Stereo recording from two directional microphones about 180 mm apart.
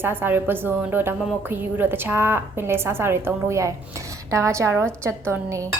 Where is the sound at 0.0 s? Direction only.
10° right (ahead or behind).